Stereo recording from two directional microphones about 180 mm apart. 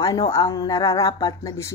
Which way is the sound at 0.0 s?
20° left (ahead or behind).